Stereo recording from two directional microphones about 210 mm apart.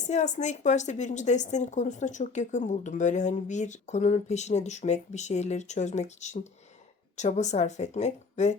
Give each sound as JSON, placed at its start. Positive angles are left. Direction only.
{"t": 0.0, "sound": "a woman's voice", "side_deg": 35}